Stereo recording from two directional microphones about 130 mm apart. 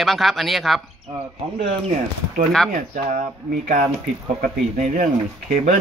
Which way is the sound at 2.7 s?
90° right.